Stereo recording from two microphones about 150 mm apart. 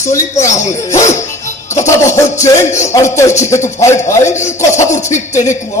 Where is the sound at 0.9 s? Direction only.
50° left (ahead or behind).